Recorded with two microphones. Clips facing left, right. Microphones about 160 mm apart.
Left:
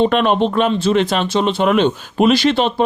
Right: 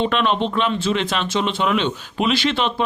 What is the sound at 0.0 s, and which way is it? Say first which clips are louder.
Speech: left 5 dB; 45° left (ahead or behind).